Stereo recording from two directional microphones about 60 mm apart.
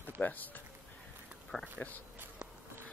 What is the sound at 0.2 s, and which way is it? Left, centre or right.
Speech, left.